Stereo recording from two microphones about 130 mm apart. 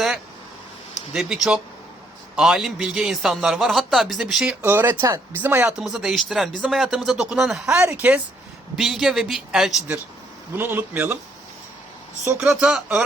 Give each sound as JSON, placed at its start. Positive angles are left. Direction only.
{"t": 1.1, "sound": "a man's voice", "side_deg": -5}
{"t": 4.6, "sound": "speech", "side_deg": -15}
{"t": 5.7, "sound": "a man's voice", "side_deg": -5}
{"t": 10.6, "sound": "speech", "side_deg": -15}
{"t": 12.4, "sound": "speech", "side_deg": -5}